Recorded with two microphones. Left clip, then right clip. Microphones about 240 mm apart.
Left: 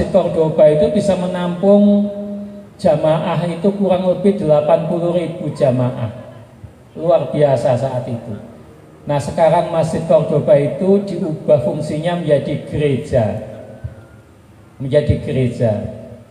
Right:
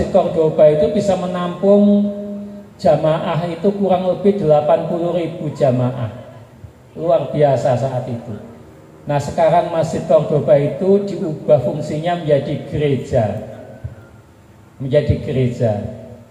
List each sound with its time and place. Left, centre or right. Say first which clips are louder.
0.1 s a man's voice: even; left
9.0 s a man's voice: left 1 dB; left
14.9 s a man's voice: left 1 dB; left